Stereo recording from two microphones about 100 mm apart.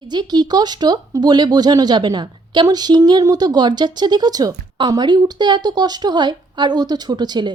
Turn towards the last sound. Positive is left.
turn(degrees=-45)  # may be behind; listen again after turning